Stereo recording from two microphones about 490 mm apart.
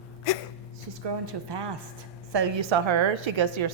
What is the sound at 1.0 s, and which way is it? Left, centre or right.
A woman's voice, right.